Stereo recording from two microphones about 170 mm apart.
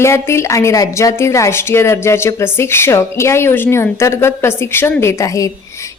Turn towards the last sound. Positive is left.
turn(degrees=20)  # may be behind; listen again after turning